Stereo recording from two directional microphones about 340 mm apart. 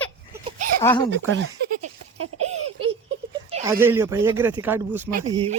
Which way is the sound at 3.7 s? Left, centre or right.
Centre.